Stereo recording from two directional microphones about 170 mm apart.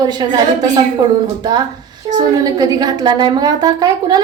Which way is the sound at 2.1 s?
25° right (ahead or behind).